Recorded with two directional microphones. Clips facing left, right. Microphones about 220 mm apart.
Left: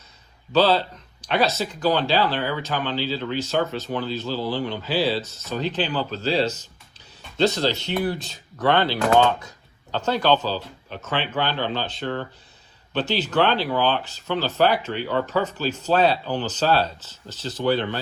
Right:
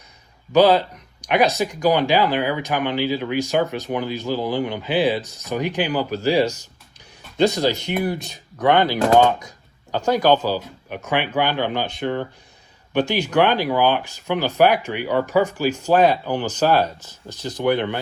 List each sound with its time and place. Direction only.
0.5 s speech: 15° right (ahead or behind)